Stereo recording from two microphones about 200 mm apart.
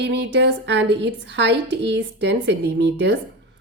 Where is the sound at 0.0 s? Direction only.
65° right (ahead or behind).